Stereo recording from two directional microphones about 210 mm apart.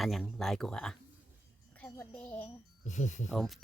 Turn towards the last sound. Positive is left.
turn(degrees=0)  # may be behind; listen again after turning